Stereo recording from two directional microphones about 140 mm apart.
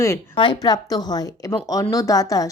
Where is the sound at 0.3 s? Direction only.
30° left (ahead or behind).